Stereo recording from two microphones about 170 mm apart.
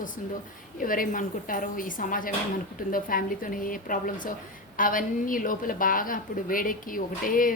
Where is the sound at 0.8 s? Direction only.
55° left (ahead or behind).